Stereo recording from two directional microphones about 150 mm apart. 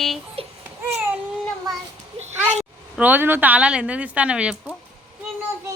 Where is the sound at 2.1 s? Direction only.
45° right (ahead or behind).